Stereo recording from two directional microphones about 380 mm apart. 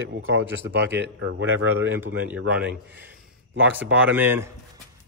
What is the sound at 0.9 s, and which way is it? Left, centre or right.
Speech, right.